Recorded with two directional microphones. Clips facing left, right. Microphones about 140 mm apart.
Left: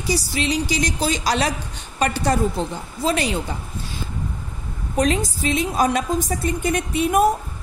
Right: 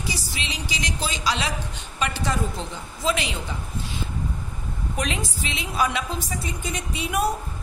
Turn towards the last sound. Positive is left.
turn(degrees=50)  # may be behind; listen again after turning